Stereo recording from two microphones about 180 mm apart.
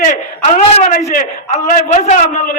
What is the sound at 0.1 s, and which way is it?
A man's voice, 40° left (ahead or behind).